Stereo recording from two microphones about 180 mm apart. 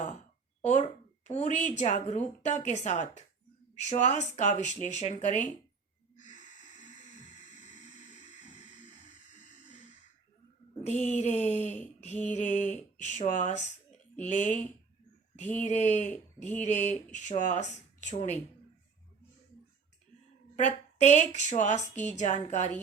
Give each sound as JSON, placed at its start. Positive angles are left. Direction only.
{"t": 0.7, "sound": "speech", "side_deg": 40}
{"t": 6.1, "sound": "snort", "side_deg": 40}
{"t": 10.8, "sound": "speech", "side_deg": 40}
{"t": 15.6, "sound": "speech", "side_deg": 40}
{"t": 20.6, "sound": "speech", "side_deg": 40}